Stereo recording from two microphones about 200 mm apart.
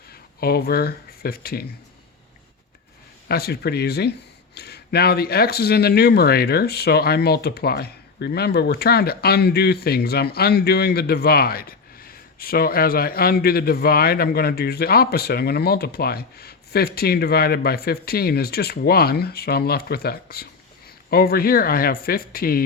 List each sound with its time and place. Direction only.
0.1 s speech: 50° left (ahead or behind)
3.2 s speech: 50° left (ahead or behind)